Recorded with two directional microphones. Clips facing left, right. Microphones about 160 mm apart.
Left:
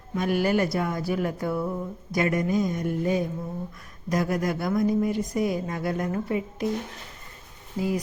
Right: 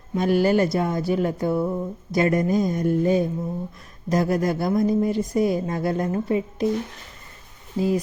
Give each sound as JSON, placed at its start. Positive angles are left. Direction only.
{"t": 0.1, "sound": "a woman's voice", "side_deg": -30}
{"t": 7.8, "sound": "speech", "side_deg": -25}